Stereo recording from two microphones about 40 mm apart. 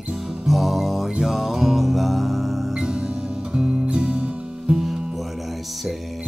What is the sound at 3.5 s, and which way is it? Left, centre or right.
Music, centre.